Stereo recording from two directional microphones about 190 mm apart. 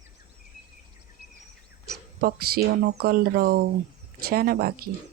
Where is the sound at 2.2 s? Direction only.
55° right (ahead or behind).